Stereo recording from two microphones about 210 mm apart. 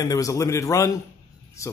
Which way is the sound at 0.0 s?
15° left (ahead or behind).